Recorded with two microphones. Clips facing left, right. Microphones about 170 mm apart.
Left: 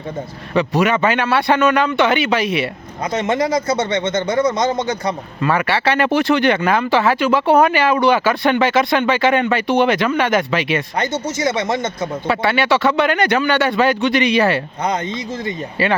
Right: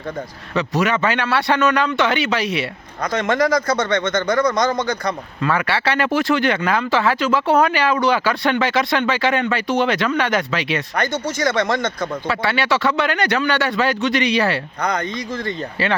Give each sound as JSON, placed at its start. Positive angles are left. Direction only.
{"t": 0.8, "sound": "a man's voice", "side_deg": 15}
{"t": 2.4, "sound": "speech", "side_deg": 50}
{"t": 3.0, "sound": "speech", "side_deg": 25}
{"t": 5.4, "sound": "a man's voice", "side_deg": 15}
{"t": 6.1, "sound": "speech", "side_deg": 70}
{"t": 6.3, "sound": "a man's voice", "side_deg": 20}
{"t": 10.9, "sound": "a man's voice", "side_deg": 25}
{"t": 15.4, "sound": "a man's voice", "side_deg": 10}